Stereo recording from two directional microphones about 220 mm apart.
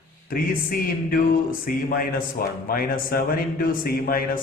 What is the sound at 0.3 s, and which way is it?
A man's voice, 40° left (ahead or behind).